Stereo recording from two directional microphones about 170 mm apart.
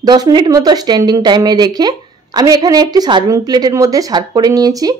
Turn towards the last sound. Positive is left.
turn(degrees=-20)  # may be behind; listen again after turning